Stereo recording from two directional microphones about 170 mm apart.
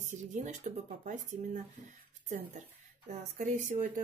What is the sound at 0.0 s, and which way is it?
Speech, 45° right (ahead or behind).